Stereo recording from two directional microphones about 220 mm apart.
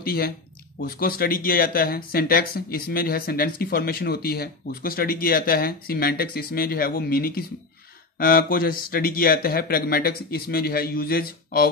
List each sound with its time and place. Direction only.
0.0 s speech: 45° left (ahead or behind)